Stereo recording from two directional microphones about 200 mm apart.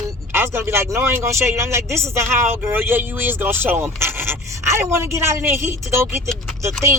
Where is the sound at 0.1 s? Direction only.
10° right (ahead or behind).